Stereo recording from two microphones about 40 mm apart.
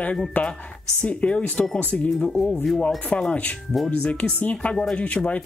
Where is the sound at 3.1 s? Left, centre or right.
Left.